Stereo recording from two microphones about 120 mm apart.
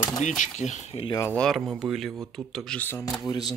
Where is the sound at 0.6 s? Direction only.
75° left (ahead or behind).